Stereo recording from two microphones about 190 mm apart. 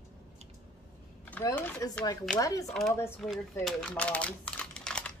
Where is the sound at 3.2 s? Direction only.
Centre (ahead or behind).